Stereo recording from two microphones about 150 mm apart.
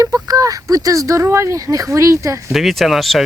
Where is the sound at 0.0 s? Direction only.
25° right (ahead or behind).